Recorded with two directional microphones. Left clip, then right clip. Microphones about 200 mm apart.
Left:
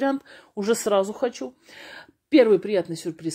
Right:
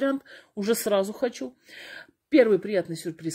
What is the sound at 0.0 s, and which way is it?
Speech, 15° right (ahead or behind).